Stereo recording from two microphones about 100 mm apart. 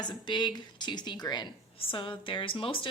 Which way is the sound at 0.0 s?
45° left (ahead or behind).